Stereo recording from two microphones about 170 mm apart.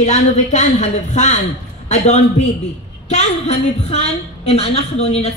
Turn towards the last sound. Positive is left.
turn(degrees=40)  # may be behind; listen again after turning